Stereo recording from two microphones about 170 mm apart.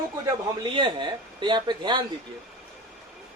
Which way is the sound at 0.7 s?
30° right (ahead or behind).